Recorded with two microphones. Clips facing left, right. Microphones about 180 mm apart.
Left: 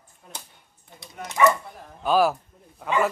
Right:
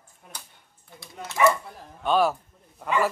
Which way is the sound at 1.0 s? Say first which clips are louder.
Left 1 dB; 15° left (ahead or behind).